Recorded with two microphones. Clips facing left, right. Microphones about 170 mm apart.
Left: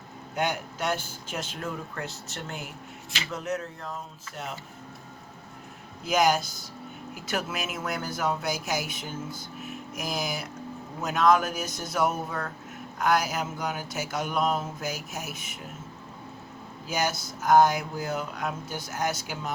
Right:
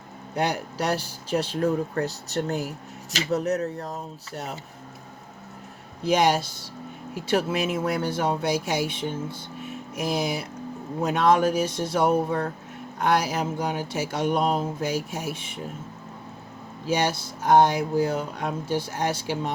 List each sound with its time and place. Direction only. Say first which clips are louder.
0.3 s speech: right 3 dB; 35° right (ahead or behind)
6.1 s speech: right 3 dB; 30° right (ahead or behind)
16.8 s speech: right 5 dB; 30° right (ahead or behind)